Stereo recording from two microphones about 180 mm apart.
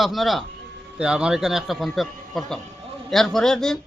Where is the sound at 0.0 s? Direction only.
Centre (ahead or behind).